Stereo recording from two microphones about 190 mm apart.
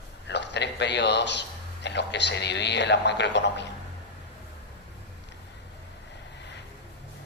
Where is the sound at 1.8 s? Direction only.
65° left (ahead or behind).